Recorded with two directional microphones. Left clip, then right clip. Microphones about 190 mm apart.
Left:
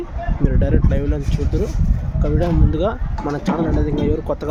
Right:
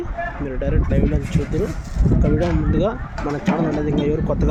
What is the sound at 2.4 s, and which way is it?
Speech, 5° left (ahead or behind).